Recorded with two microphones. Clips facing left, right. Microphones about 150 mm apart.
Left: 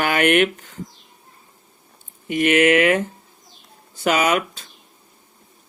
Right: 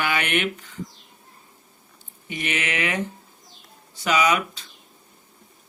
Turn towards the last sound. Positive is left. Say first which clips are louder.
# left 2 dB
turn(degrees=50)  # may be behind; listen again after turning